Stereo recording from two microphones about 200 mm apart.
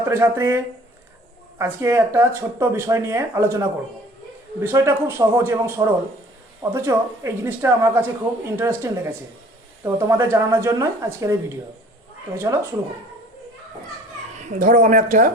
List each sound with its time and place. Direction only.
0.0 s speech: 15° right (ahead or behind)
14.3 s speech: 40° right (ahead or behind)